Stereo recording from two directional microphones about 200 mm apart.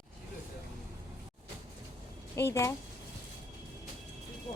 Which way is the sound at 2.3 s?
15° left (ahead or behind).